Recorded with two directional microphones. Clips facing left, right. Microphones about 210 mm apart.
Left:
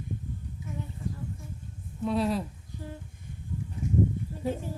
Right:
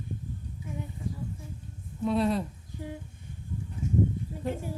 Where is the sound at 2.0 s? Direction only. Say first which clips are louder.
Right 1 dB; centre (ahead or behind).